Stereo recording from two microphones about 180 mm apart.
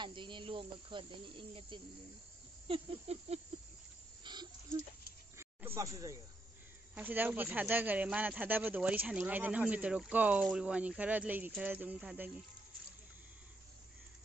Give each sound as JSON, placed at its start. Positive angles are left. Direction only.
{"t": 0.0, "sound": "speech", "side_deg": -25}
{"t": 2.7, "sound": "a sound", "side_deg": -35}
{"t": 5.8, "sound": "speech", "side_deg": -20}